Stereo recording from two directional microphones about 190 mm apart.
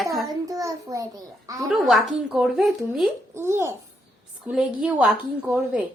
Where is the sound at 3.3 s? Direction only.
15° right (ahead or behind).